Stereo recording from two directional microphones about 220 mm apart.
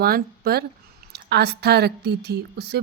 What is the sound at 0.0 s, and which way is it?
Speech, 45° right (ahead or behind).